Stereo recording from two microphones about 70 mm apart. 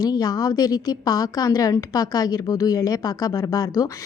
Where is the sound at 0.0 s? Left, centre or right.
Left.